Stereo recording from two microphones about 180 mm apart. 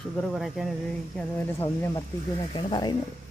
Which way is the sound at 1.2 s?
10° left (ahead or behind).